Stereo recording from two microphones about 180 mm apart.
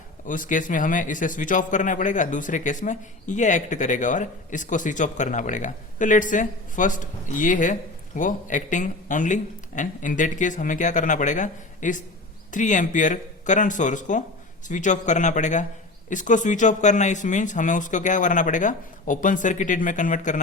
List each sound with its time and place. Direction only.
0.3 s a man's voice: 45° left (ahead or behind)